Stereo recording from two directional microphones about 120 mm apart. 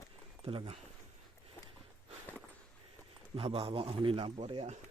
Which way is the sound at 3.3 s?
50° right (ahead or behind).